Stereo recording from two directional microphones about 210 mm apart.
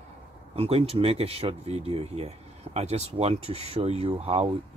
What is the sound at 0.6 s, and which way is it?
Speech, 30° right (ahead or behind).